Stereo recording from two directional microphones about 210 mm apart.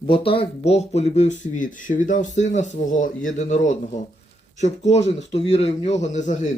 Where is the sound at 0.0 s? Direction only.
25° left (ahead or behind).